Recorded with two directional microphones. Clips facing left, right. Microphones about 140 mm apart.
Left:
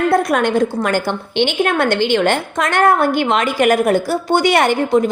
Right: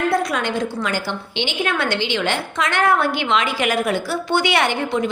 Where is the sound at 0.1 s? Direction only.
50° left (ahead or behind).